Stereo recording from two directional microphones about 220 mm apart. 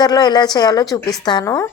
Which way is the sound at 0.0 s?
20° left (ahead or behind).